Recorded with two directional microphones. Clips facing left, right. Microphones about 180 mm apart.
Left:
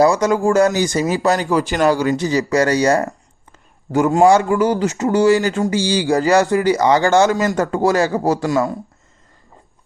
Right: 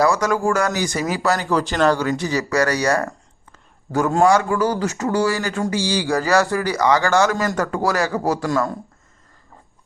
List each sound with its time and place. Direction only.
0.0 s speech: 20° left (ahead or behind)